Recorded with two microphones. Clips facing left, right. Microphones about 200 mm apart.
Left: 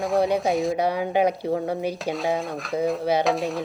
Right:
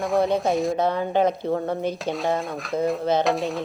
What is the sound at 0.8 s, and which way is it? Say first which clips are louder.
Speech: even; 10° left (ahead or behind).